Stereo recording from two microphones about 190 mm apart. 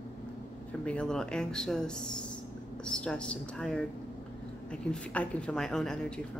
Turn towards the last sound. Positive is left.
turn(degrees=5)  # may be behind; listen again after turning